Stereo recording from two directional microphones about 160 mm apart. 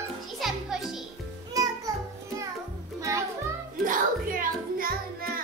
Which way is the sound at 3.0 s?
20° right (ahead or behind).